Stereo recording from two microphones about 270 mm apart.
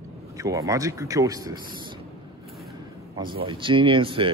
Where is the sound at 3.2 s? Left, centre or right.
Centre.